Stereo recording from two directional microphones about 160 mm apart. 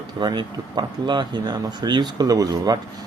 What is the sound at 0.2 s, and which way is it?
Speech, 25° right (ahead or behind).